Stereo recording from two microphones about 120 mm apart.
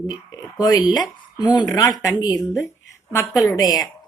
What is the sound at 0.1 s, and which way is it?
A woman's voice, 35° left (ahead or behind).